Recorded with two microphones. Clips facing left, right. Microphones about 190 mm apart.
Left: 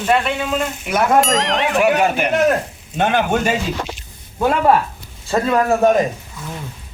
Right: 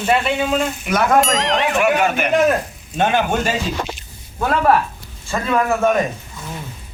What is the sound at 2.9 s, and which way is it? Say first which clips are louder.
Speech: left 1 dB; 10° left (ahead or behind).